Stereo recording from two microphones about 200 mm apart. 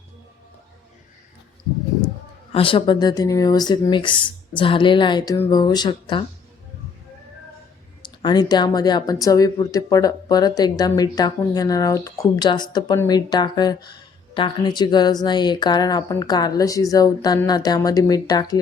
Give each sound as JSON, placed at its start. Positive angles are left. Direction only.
{"t": 2.5, "sound": "a woman's voice", "side_deg": 25}
{"t": 8.0, "sound": "a woman's voice", "side_deg": 20}